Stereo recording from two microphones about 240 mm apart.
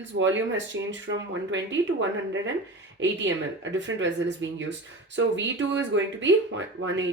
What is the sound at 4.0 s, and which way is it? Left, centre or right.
Speech, right.